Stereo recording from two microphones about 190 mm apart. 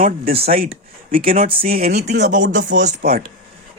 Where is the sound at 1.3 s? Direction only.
45° right (ahead or behind).